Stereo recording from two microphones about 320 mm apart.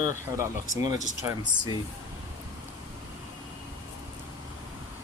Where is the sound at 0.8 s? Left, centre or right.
Centre.